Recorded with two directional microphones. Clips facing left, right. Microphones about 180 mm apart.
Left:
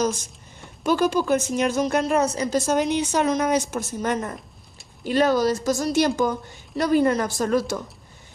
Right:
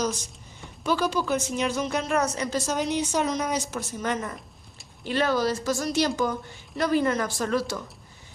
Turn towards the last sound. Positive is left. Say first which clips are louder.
# left 4 dB
turn(degrees=45)  # may be behind; listen again after turning